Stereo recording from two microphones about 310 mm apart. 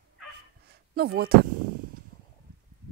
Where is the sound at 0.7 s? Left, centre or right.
Right.